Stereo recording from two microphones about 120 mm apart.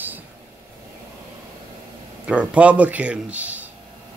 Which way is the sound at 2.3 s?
10° right (ahead or behind).